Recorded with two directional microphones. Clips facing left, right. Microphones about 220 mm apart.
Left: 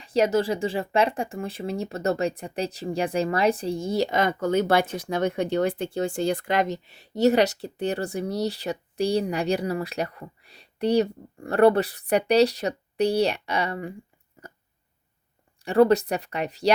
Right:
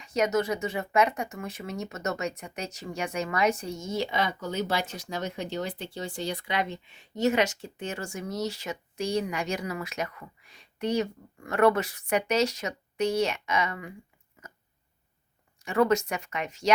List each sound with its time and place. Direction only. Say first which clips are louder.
0.0 s speech: left 4 dB; 30° left (ahead or behind)
14.4 s a sound: left 5 dB; 35° left (ahead or behind)
15.6 s speech: left 6 dB; 35° left (ahead or behind)